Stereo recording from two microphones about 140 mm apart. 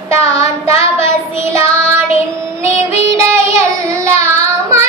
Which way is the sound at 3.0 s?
20° right (ahead or behind).